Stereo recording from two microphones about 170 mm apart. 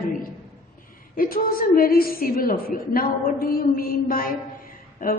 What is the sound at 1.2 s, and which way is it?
A woman's voice, 60° left (ahead or behind).